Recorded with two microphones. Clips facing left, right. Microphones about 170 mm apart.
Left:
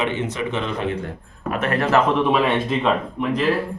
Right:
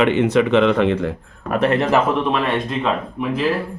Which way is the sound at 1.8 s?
15° right (ahead or behind).